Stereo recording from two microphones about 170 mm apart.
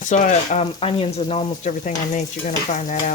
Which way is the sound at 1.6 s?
45° left (ahead or behind).